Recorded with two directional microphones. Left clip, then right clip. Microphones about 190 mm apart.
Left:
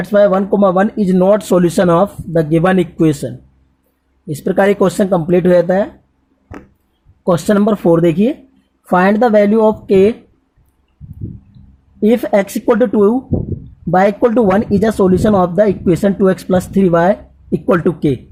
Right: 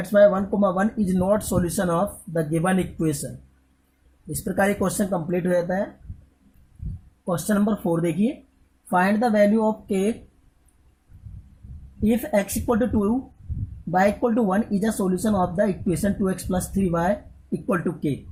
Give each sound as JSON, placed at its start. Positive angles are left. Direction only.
{"t": 0.0, "sound": "speech", "side_deg": 45}
{"t": 4.3, "sound": "speech", "side_deg": 40}
{"t": 7.3, "sound": "speech", "side_deg": 40}
{"t": 12.0, "sound": "speech", "side_deg": 45}